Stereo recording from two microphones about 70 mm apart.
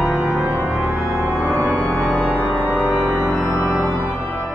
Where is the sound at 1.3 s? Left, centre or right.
Centre.